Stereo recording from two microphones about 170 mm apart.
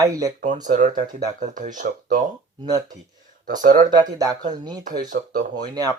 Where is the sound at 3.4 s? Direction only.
50° right (ahead or behind).